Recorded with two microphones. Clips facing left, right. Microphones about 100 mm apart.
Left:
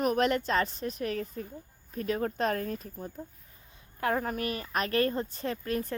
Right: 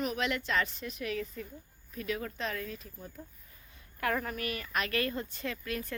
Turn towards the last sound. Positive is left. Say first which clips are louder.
# left 5 dB
turn(degrees=40)  # may be behind; listen again after turning